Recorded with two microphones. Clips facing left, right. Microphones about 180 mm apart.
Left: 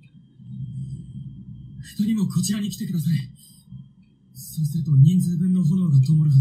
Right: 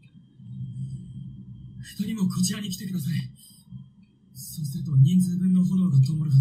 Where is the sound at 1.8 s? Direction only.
35° left (ahead or behind).